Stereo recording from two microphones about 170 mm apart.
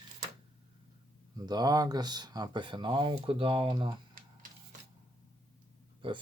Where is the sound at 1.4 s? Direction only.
25° right (ahead or behind).